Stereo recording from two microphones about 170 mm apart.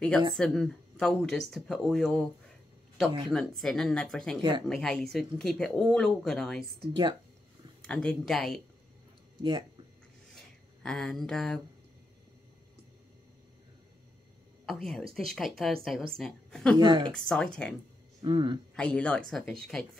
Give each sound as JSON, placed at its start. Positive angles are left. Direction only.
{"t": 0.4, "sound": "speech", "side_deg": 5}
{"t": 3.3, "sound": "speech", "side_deg": 0}
{"t": 4.4, "sound": "speech", "side_deg": -25}
{"t": 4.6, "sound": "speech", "side_deg": 5}
{"t": 6.9, "sound": "speech", "side_deg": -25}
{"t": 7.8, "sound": "speech", "side_deg": 5}
{"t": 9.4, "sound": "speech", "side_deg": -25}
{"t": 10.3, "sound": "a sound", "side_deg": 5}
{"t": 14.7, "sound": "speech", "side_deg": 0}
{"t": 16.7, "sound": "speech", "side_deg": -25}
{"t": 17.1, "sound": "speech", "side_deg": 5}
{"t": 18.2, "sound": "speech", "side_deg": -30}
{"t": 18.8, "sound": "speech", "side_deg": 5}